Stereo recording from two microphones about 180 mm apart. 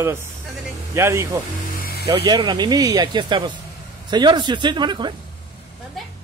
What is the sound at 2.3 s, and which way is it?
Speech, 25° right (ahead or behind).